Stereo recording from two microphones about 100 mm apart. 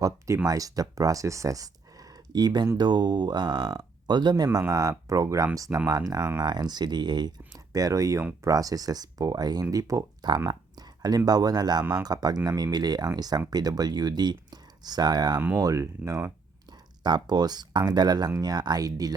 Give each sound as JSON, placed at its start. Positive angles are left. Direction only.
{"t": 0.4, "sound": "speech", "side_deg": -35}
{"t": 10.4, "sound": "a sound", "side_deg": -40}
{"t": 11.3, "sound": "speech", "side_deg": -40}
{"t": 17.0, "sound": "speech", "side_deg": -45}